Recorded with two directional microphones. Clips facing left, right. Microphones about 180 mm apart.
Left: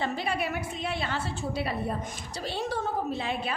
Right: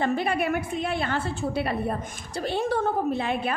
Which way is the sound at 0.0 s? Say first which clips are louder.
Right 5 dB; 55° right (ahead or behind).